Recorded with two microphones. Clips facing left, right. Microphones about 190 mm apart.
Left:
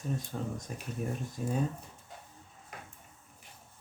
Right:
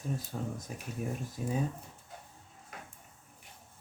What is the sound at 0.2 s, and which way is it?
Speech, 5° right (ahead or behind).